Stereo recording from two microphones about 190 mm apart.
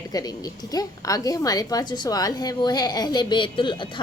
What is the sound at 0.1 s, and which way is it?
A woman's voice, 20° left (ahead or behind).